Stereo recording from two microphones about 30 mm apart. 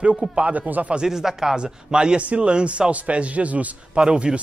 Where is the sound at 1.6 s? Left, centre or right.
Right.